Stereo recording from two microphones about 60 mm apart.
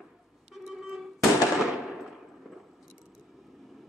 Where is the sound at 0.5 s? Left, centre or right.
Centre.